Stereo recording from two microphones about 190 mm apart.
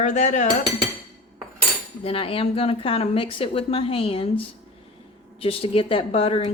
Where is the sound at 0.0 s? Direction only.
40° left (ahead or behind).